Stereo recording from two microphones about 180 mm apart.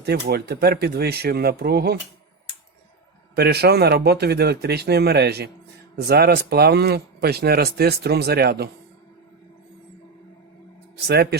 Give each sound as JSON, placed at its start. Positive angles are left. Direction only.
{"t": 0.0, "sound": "speech", "side_deg": -60}
{"t": 3.3, "sound": "speech", "side_deg": -60}
{"t": 10.9, "sound": "speech", "side_deg": -65}